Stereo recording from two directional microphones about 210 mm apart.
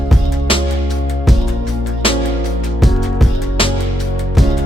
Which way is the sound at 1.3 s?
Centre (ahead or behind).